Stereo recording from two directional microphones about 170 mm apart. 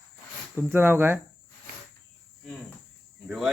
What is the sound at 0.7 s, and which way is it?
Speech, 10° right (ahead or behind).